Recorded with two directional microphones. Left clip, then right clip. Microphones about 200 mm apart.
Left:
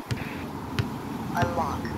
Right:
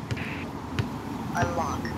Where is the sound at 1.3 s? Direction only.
20° right (ahead or behind).